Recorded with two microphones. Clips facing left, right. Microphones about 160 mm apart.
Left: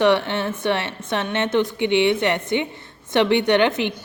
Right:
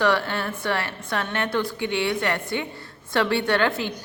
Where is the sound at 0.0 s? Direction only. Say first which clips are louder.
Left 4 dB; 20° left (ahead or behind).